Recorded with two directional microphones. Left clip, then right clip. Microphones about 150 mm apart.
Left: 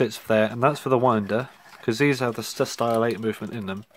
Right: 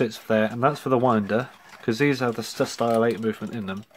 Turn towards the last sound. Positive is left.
turn(degrees=40)  # may be behind; listen again after turning